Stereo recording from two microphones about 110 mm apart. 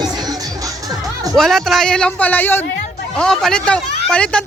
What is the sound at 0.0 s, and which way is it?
Music, 35° right (ahead or behind).